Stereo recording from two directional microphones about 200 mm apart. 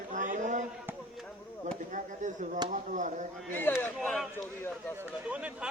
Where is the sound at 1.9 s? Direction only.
40° right (ahead or behind).